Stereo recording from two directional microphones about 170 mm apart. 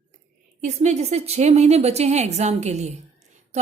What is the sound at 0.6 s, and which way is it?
A woman's voice, 40° right (ahead or behind).